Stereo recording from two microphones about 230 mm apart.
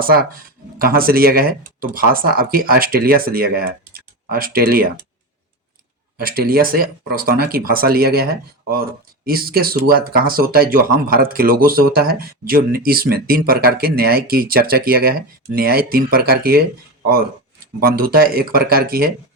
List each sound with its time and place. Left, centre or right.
0.8 s speech: right
6.1 s speech: right
17.7 s speech: right